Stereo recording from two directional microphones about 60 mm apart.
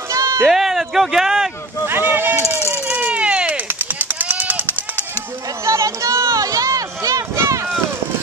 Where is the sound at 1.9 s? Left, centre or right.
Right.